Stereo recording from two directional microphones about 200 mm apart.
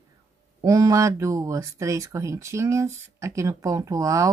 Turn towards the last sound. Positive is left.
turn(degrees=-15)  # may be behind; listen again after turning